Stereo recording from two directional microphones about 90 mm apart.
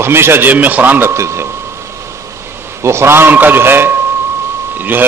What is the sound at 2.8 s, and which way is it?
A man's voice, 30° right (ahead or behind).